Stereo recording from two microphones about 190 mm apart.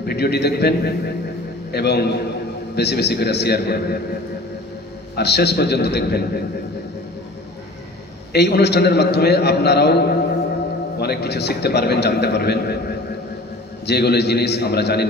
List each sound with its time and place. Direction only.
0.0 s a man's voice: 60° left (ahead or behind)
5.1 s a man's voice: 60° left (ahead or behind)
8.3 s a man's voice: 60° left (ahead or behind)